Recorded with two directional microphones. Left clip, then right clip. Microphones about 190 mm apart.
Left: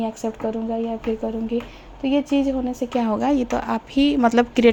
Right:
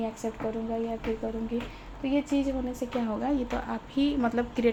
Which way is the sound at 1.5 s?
50° left (ahead or behind).